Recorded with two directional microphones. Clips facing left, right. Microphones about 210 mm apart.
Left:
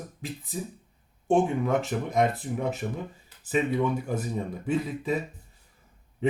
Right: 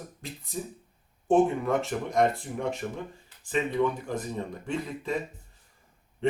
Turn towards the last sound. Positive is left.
turn(degrees=5)  # may be behind; listen again after turning